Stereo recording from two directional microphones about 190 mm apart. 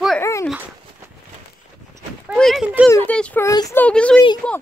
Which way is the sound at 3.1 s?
5° left (ahead or behind).